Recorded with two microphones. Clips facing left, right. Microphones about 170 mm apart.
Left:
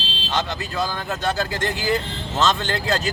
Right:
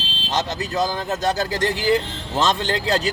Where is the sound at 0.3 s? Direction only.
40° right (ahead or behind).